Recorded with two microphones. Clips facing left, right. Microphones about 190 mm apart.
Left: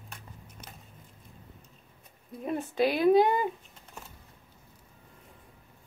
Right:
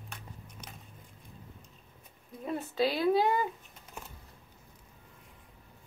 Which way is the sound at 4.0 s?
10° right (ahead or behind).